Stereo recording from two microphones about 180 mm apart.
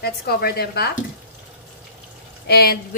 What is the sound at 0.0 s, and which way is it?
Speech, 60° left (ahead or behind).